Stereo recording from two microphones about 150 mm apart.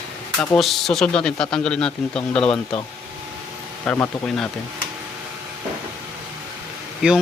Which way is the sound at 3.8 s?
15° left (ahead or behind).